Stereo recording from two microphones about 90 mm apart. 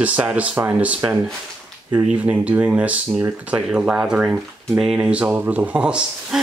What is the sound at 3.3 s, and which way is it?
Speech, 15° right (ahead or behind).